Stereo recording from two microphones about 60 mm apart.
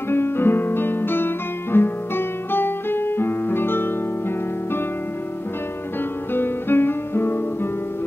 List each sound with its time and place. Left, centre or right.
0.1 s guitar: left
6.3 s music: left